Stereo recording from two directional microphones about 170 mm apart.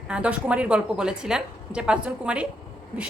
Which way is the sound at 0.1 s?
5° right (ahead or behind).